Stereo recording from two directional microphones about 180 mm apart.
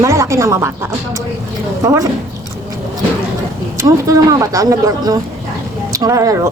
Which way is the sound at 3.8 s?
20° right (ahead or behind).